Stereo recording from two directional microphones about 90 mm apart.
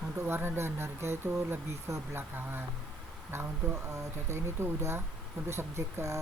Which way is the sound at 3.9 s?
30° right (ahead or behind).